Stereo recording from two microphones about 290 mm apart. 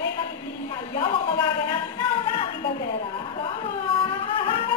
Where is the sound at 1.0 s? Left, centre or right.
Centre.